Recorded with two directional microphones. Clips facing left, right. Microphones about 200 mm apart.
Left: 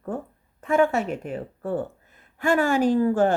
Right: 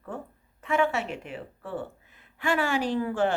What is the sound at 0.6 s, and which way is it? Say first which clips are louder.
A woman's voice: left 5 dB; 45° left (ahead or behind).